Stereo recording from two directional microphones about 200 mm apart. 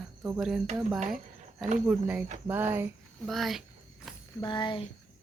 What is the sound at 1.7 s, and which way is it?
Speech, 5° right (ahead or behind).